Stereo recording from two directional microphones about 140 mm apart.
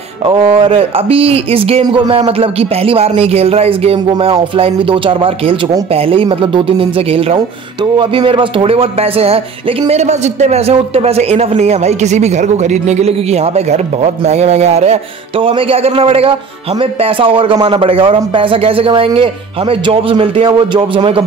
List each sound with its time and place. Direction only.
0.2 s a man's voice: 40° right (ahead or behind)